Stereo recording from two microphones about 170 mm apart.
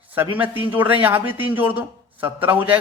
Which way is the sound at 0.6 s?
10° right (ahead or behind).